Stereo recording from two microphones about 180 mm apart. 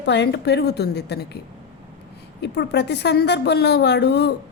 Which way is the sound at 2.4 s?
70° left (ahead or behind).